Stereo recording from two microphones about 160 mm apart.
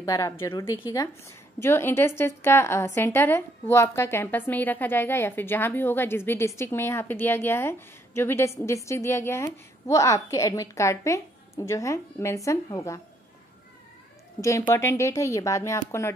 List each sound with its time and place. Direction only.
0.0 s a woman's voice: 20° left (ahead or behind)
14.7 s speech: 20° left (ahead or behind)